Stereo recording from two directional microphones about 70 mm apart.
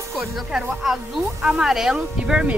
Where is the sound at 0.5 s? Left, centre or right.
Centre.